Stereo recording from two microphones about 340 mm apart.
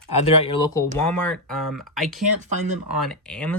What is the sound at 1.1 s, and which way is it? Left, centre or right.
Speech, centre.